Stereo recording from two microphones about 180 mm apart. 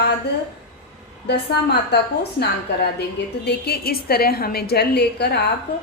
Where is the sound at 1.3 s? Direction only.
65° left (ahead or behind).